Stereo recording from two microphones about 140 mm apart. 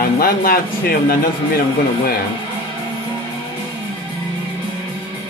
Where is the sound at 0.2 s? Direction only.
90° left.